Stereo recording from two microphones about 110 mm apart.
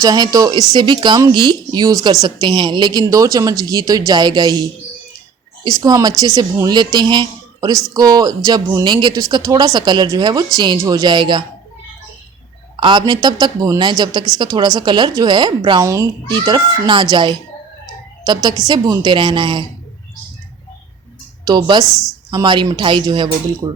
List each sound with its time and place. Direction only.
0.0 s a woman's voice: 35° right (ahead or behind)
0.7 s a woman's voice: 45° right (ahead or behind)
12.8 s a woman's voice: 45° right (ahead or behind)
15.8 s a child's voice: 30° right (ahead or behind)
16.3 s a woman's voice: 45° right (ahead or behind)
18.7 s a woman's voice: 45° right (ahead or behind)
21.4 s a woman's voice: 40° right (ahead or behind)
21.8 s a woman's voice: centre (ahead or behind)
22.3 s a woman's voice: 45° right (ahead or behind)